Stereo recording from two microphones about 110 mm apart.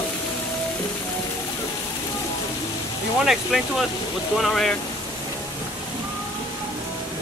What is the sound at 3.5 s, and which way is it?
Speech, 5° right (ahead or behind).